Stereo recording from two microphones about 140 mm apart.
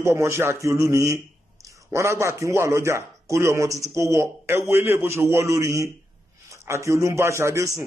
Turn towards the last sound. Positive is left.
turn(degrees=-20)  # may be behind; listen again after turning